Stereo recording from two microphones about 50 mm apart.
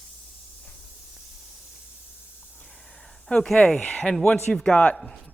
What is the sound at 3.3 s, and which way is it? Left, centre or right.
Speech, centre.